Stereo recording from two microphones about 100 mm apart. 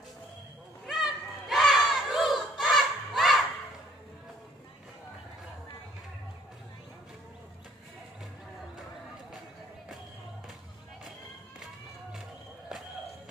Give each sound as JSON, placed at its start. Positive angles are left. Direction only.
{"t": 0.8, "sound": "crowd", "side_deg": 0}